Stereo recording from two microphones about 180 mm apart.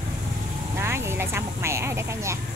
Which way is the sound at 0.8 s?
15° right (ahead or behind).